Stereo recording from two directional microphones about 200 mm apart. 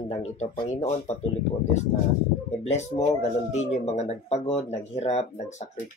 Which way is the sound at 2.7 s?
35° left (ahead or behind).